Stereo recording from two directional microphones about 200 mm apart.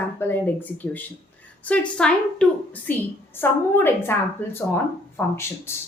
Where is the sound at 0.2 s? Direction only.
10° left (ahead or behind).